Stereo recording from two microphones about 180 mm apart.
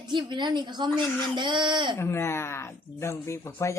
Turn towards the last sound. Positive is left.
turn(degrees=15)  # may be behind; listen again after turning